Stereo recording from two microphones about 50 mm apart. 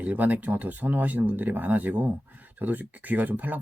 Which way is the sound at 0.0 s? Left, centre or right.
Right.